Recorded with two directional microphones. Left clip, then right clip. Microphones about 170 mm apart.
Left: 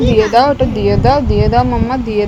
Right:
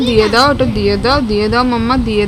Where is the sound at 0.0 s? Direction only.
25° right (ahead or behind).